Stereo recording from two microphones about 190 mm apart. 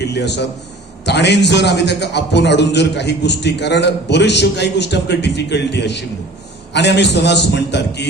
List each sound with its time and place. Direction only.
0.0 s a man's voice: 65° left (ahead or behind)